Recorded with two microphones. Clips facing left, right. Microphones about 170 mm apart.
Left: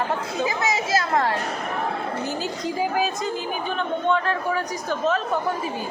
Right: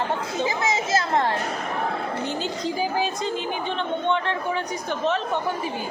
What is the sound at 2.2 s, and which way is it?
Speech, 25° right (ahead or behind).